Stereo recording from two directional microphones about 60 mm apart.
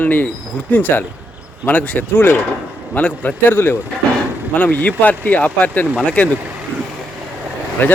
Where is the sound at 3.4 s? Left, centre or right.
Left; by 6.3 s centre.